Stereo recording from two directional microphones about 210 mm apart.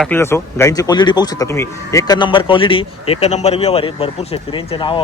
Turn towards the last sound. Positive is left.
turn(degrees=25)  # may be behind; listen again after turning